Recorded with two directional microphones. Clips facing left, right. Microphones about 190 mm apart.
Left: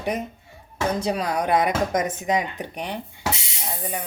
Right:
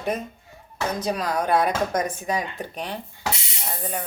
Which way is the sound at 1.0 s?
25° left (ahead or behind).